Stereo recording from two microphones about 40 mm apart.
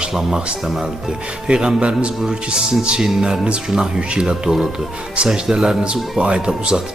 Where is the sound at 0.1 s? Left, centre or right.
Centre.